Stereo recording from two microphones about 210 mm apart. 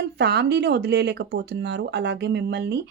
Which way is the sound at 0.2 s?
50° right (ahead or behind).